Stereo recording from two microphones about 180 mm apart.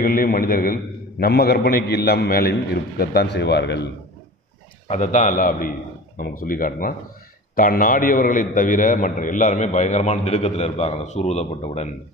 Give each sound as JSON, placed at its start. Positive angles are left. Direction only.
{"t": 0.0, "sound": "a man's voice", "side_deg": 55}
{"t": 4.8, "sound": "a man's voice", "side_deg": 40}